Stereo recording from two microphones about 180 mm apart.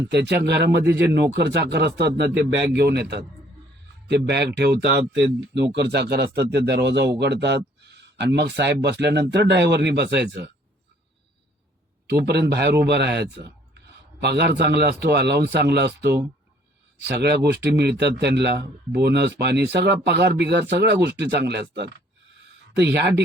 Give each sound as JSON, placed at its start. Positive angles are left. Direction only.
{"t": 0.1, "sound": "a man's voice", "side_deg": -70}
{"t": 12.3, "sound": "speech", "side_deg": -65}